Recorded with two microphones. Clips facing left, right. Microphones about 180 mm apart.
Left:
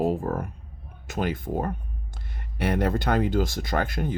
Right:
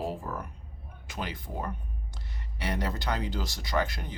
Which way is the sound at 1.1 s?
50° left (ahead or behind).